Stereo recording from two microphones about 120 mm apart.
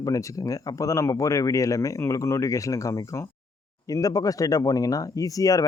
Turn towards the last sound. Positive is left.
turn(degrees=30)  # may be behind; listen again after turning